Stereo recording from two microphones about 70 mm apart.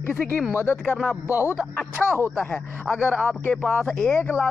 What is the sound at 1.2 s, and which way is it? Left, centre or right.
Speech, right.